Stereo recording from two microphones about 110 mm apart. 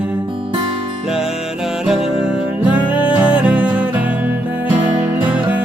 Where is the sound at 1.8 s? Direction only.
5° right (ahead or behind).